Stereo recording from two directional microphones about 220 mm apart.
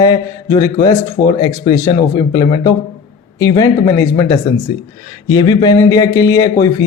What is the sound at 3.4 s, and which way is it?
Speech, 15° left (ahead or behind).